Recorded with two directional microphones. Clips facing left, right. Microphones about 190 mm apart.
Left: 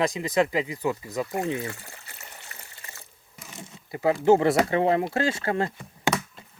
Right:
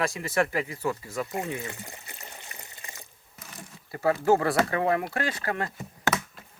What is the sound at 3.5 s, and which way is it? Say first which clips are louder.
Speech: left 3 dB; 25° left (ahead or behind).